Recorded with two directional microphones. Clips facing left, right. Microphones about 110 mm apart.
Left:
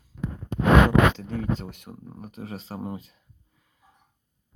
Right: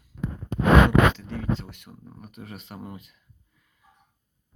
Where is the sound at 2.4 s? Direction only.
30° left (ahead or behind).